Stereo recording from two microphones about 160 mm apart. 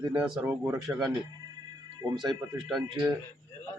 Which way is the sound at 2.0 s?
25° right (ahead or behind).